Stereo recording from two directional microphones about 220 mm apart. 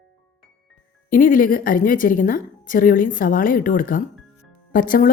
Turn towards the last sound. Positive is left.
turn(degrees=40)  # may be behind; listen again after turning